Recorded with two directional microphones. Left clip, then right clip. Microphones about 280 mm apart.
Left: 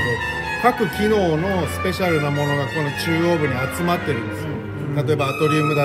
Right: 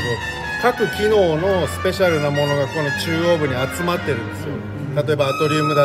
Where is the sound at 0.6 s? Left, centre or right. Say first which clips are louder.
Right 1 dB; right.